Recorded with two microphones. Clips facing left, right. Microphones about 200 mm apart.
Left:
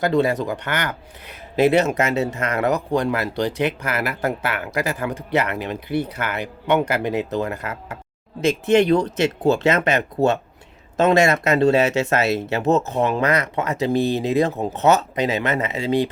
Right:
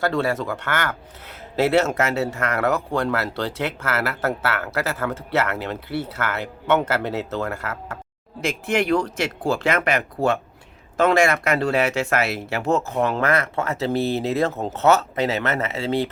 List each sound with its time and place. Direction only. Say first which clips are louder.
0.0 s speech: left 3 dB; 15° left (ahead or behind)